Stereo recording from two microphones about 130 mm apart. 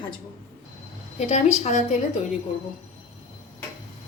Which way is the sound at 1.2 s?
60° left (ahead or behind).